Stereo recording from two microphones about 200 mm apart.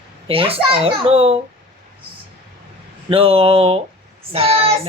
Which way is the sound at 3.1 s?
30° right (ahead or behind).